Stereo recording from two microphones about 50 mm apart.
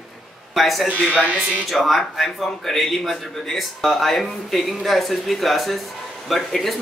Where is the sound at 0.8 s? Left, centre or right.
Right.